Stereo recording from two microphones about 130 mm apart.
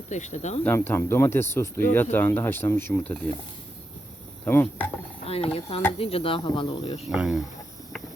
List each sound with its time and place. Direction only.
0.1 s speech: 65° left (ahead or behind)
0.6 s speech: 15° left (ahead or behind)
4.4 s speech: 15° left (ahead or behind)
5.2 s speech: 50° left (ahead or behind)
7.1 s speech: 5° right (ahead or behind)